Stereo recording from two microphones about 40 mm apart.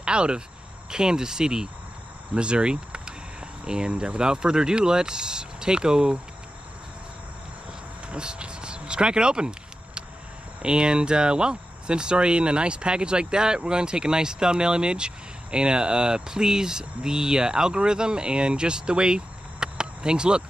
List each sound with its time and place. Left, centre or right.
0.0 s speech: right
8.1 s a sound: right
10.6 s speech: right